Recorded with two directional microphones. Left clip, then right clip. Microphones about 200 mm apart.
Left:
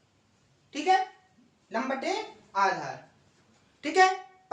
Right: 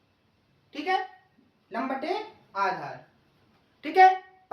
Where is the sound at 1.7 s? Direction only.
15° left (ahead or behind).